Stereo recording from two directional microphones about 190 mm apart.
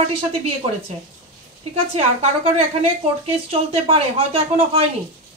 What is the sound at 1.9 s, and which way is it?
Speech, 30° right (ahead or behind).